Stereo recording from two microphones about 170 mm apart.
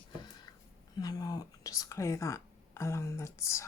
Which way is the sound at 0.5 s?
25° left (ahead or behind).